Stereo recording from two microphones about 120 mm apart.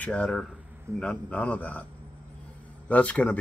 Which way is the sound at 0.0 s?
10° left (ahead or behind).